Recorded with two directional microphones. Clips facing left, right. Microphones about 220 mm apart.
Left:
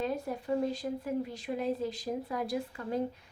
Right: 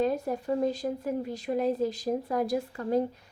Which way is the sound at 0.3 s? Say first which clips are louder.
Right 4 dB; 45° right (ahead or behind).